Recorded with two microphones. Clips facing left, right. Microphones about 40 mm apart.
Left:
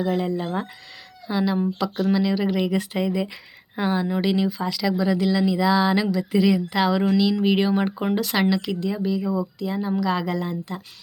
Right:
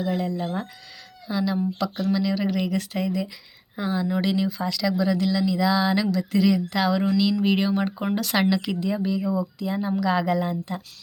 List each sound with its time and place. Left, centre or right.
0.0 s speech: left; by 10.8 s centre